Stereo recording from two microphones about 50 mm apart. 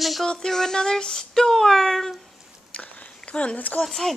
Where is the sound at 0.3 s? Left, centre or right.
Centre.